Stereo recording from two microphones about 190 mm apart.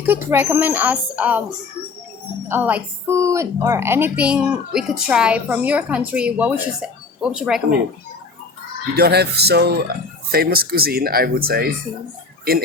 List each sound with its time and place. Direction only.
0.0 s a woman's voice: 10° right (ahead or behind)
2.5 s a woman's voice: 10° right (ahead or behind)
9.0 s speech: 55° right (ahead or behind)